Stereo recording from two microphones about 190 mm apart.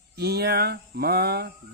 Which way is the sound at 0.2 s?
55° right (ahead or behind).